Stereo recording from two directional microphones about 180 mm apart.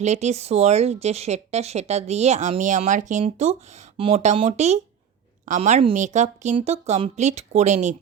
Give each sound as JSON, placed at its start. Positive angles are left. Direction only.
{"t": 0.0, "sound": "speech", "side_deg": -40}